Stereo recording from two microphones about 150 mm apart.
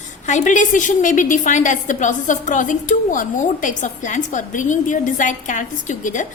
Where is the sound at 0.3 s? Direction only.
55° left (ahead or behind).